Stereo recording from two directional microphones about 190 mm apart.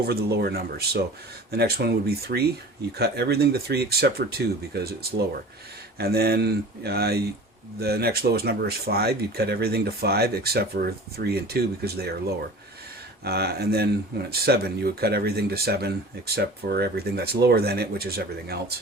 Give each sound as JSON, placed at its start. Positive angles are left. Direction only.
{"t": 0.0, "sound": "speech", "side_deg": -55}
{"t": 13.2, "sound": "speech", "side_deg": -55}